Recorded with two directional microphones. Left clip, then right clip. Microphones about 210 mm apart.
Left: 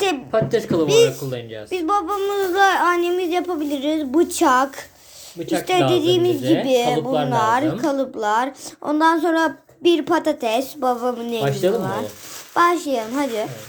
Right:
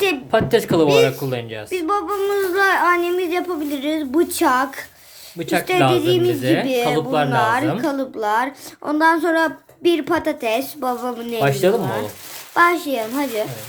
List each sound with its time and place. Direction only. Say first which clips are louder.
0.3 s speech: right 3 dB; 40° right (ahead or behind)
0.9 s speech: left 3 dB; 10° left (ahead or behind)
1.3 s speech: right 3 dB; 35° right (ahead or behind)
1.7 s speech: left 1 dB; 5° left (ahead or behind)
5.4 s speech: right 1 dB; 35° right (ahead or behind)
5.9 s speech: even; 5° left (ahead or behind)
6.4 s speech: right 1 dB; 35° right (ahead or behind)
6.7 s speech: left 2 dB; 5° left (ahead or behind)
6.9 s speech: right 2 dB; 35° right (ahead or behind)
7.3 s a woman's voice: even; 5° left (ahead or behind)
11.3 s speech: right 5 dB; 30° right (ahead or behind)
12.5 s a woman's voice: right 1 dB; 5° left (ahead or behind)